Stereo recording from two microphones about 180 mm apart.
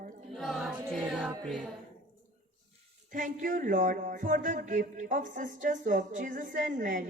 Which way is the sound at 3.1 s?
45° right (ahead or behind).